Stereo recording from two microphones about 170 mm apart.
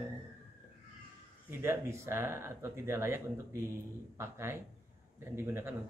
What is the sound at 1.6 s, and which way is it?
Speech, 15° right (ahead or behind).